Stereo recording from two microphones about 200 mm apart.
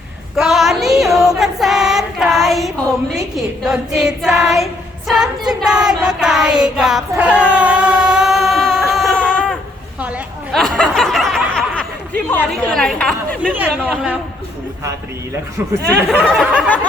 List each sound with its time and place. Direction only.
0.3 s female singing: centre (ahead or behind)
6.0 s child singing: 5° right (ahead or behind)
10.0 s a sound: 5° right (ahead or behind)
12.3 s speech: 5° left (ahead or behind)
13.5 s speech: 10° right (ahead or behind)
16.0 s a sound: centre (ahead or behind)